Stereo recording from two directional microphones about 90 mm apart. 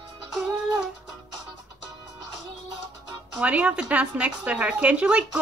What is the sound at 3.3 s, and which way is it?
Speech, 10° right (ahead or behind).